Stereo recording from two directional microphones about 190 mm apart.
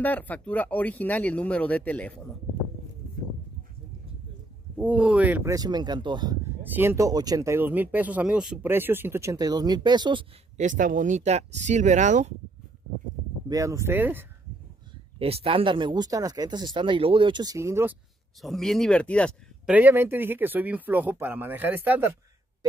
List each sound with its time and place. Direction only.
0.0 s speech: 10° left (ahead or behind)
4.7 s speech: 5° right (ahead or behind); by 6.3 s 25° right (ahead or behind)
6.6 s speech: 10° right (ahead or behind)
10.6 s speech: 45° right (ahead or behind)
13.5 s speech: 15° right (ahead or behind)
15.1 s speech: 30° right (ahead or behind); by 17.9 s 15° right (ahead or behind)
18.4 s speech: centre (ahead or behind)
19.7 s speech: 10° right (ahead or behind)